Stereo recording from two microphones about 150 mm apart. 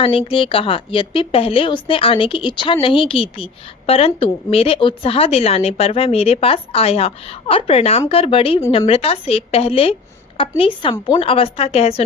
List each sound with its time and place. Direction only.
0.0 s a woman's voice: 35° left (ahead or behind)